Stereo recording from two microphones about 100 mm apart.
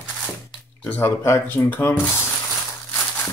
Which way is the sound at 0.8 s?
15° left (ahead or behind).